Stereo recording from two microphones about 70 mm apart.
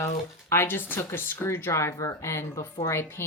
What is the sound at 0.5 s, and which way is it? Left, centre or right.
Speech, left.